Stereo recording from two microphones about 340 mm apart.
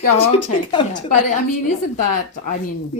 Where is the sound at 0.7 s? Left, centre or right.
Left.